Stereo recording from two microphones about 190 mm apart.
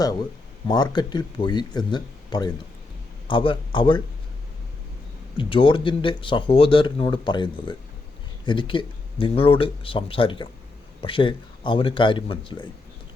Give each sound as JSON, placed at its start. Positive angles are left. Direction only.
{"t": 0.7, "sound": "speech", "side_deg": 20}
{"t": 5.4, "sound": "speech", "side_deg": 25}